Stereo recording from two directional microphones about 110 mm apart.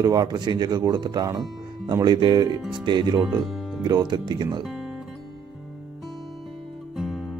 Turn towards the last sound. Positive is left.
turn(degrees=0)  # may be behind; listen again after turning